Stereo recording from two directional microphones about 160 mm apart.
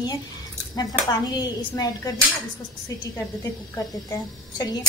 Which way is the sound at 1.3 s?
25° left (ahead or behind).